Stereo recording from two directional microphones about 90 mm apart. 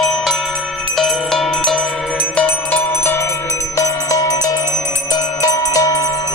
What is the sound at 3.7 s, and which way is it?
Music, 35° left (ahead or behind).